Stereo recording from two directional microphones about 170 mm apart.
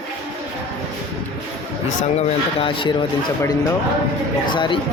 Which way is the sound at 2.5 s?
30° left (ahead or behind).